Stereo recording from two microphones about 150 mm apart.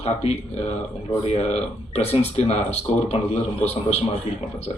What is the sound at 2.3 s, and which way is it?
Speech, 45° left (ahead or behind).